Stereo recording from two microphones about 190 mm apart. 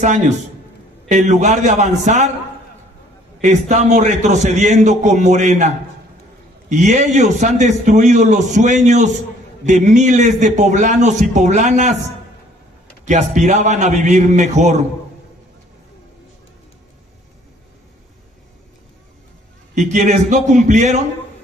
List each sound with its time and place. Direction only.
0.0 s a man's voice: 40° right (ahead or behind)
3.3 s a man's voice: 40° right (ahead or behind)
13.0 s a man's voice: 40° right (ahead or behind)
19.9 s a man's voice: 40° right (ahead or behind)